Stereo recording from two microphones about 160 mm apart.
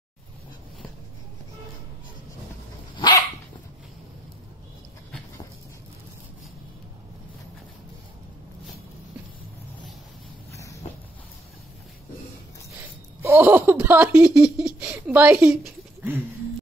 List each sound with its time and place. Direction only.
3.0 s dog: 20° left (ahead or behind)
13.2 s speech: 15° right (ahead or behind)